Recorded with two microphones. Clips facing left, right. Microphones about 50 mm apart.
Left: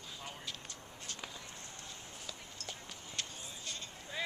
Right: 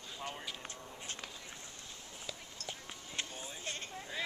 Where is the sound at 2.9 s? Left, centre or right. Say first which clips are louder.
Right 2 dB; right.